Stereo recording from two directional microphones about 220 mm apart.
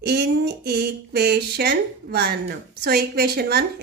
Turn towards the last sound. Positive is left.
turn(degrees=-45)  # may be behind; listen again after turning